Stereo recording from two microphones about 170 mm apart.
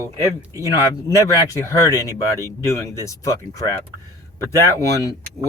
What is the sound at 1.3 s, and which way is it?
Speech, 20° left (ahead or behind).